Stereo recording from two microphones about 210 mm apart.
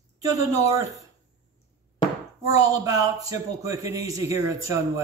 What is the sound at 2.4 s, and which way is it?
A man's voice, 15° right (ahead or behind).